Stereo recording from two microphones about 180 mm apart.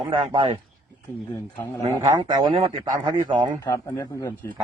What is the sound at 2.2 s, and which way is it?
Speech, 25° right (ahead or behind).